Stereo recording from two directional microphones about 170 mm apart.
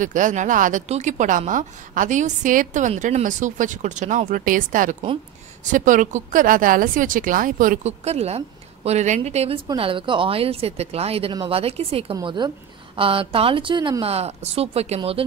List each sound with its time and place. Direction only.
0.0 s a woman's voice: 50° right (ahead or behind); by 15.2 s 35° right (ahead or behind)